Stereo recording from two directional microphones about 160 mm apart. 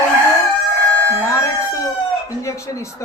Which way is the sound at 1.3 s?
20° left (ahead or behind).